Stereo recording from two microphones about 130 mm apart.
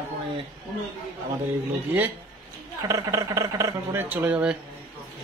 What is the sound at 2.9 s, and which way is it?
Speech, 25° right (ahead or behind).